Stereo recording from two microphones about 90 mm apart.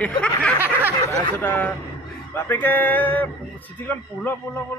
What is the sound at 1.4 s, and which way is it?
A man's voice, 25° left (ahead or behind).